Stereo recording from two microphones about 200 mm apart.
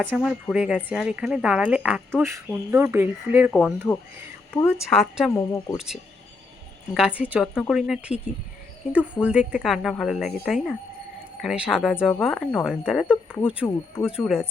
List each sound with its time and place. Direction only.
0.0 s speech: centre (ahead or behind)
5.5 s speech: 15° left (ahead or behind)
5.7 s speech: 5° right (ahead or behind)